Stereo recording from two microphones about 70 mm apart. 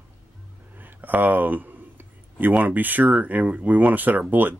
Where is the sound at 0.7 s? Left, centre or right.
Right.